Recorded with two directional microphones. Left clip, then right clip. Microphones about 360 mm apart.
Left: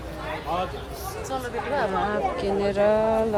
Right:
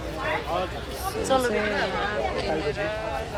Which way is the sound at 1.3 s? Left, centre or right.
Right.